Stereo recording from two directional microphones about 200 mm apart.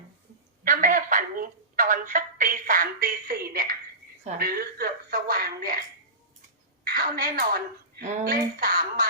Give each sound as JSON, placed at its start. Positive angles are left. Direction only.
{"t": 0.6, "sound": "telephone", "side_deg": -40}
{"t": 4.4, "sound": "a woman's voice", "side_deg": -50}
{"t": 6.8, "sound": "a woman's voice", "side_deg": -50}